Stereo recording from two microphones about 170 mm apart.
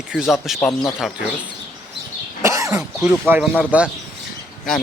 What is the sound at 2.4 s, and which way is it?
Speech, 20° right (ahead or behind).